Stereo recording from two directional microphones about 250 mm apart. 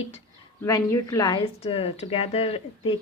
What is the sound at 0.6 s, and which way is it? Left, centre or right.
A woman's voice, centre.